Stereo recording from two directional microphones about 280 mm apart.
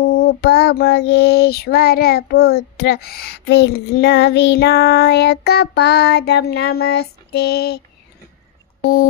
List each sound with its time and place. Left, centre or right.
0.2 s child singing: left